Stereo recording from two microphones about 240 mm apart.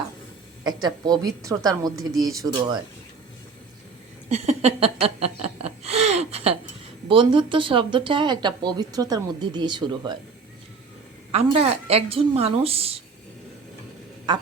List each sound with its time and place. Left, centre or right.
0.6 s a woman's voice: centre
4.3 s a sound: right
7.1 s speech: right
11.3 s speech: right